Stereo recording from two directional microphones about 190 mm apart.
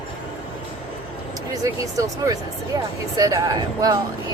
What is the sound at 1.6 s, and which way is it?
Speech, 15° right (ahead or behind).